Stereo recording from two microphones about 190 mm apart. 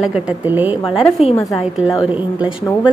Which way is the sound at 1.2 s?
30° left (ahead or behind).